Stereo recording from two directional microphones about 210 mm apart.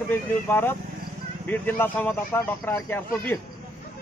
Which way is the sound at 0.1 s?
10° left (ahead or behind).